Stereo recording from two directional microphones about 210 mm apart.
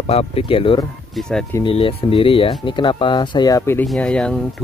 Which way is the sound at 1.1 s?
5° left (ahead or behind).